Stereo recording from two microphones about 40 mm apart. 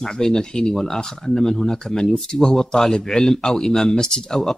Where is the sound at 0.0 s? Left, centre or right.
Centre.